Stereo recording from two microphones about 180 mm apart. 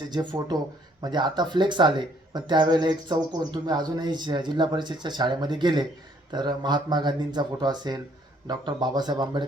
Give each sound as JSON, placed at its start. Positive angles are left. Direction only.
{"t": 0.1, "sound": "speech", "side_deg": -25}